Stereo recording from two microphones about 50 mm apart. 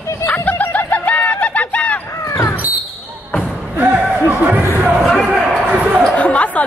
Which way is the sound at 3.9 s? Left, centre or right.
Right.